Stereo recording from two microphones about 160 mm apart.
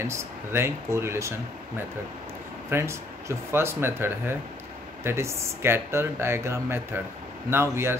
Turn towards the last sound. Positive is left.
turn(degrees=-15)  # may be behind; listen again after turning